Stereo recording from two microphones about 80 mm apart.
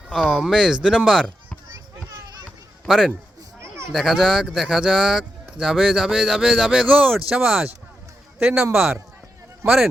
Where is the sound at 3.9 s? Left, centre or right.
Centre.